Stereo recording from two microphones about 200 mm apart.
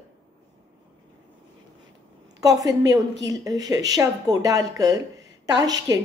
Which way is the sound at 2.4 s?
15° right (ahead or behind).